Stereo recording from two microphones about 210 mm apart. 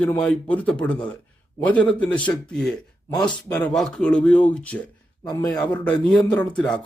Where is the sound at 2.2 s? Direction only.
5° left (ahead or behind).